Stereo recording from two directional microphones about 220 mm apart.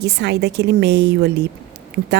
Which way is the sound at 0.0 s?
50° right (ahead or behind).